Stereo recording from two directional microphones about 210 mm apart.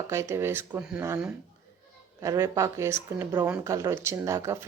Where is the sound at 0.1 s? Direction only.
10° right (ahead or behind).